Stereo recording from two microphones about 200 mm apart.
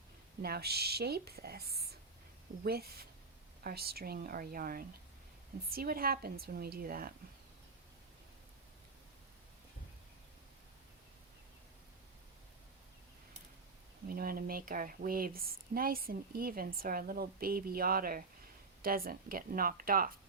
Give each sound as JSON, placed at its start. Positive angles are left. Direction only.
{"t": 0.4, "sound": "speech", "side_deg": -50}
{"t": 14.1, "sound": "speech", "side_deg": -45}